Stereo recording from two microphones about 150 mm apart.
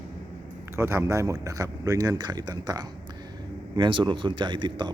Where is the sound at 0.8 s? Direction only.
15° right (ahead or behind).